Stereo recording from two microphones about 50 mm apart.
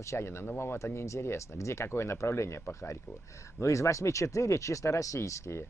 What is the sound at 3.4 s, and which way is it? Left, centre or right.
Speech, left.